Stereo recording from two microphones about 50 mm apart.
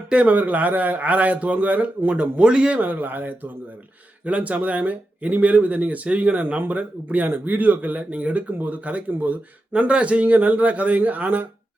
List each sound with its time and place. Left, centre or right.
0.1 s a man's voice: right
2.0 s speech: right
2.7 s a man's voice: right
4.2 s a man's voice: right